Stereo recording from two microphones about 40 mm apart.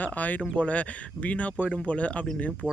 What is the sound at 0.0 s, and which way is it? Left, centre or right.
Speech, left.